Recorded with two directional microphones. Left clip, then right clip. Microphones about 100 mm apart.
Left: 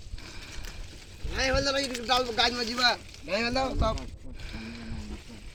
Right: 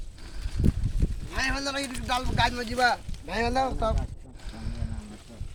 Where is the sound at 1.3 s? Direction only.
40° right (ahead or behind).